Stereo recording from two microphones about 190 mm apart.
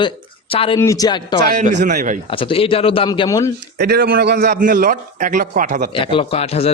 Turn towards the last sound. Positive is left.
turn(degrees=30)  # may be behind; listen again after turning